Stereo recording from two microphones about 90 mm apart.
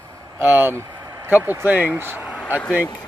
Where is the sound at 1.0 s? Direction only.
40° right (ahead or behind).